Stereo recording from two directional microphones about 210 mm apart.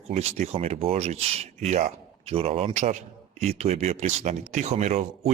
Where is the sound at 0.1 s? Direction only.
30° right (ahead or behind).